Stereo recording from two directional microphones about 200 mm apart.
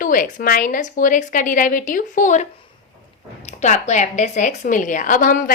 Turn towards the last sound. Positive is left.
turn(degrees=45)  # may be behind; listen again after turning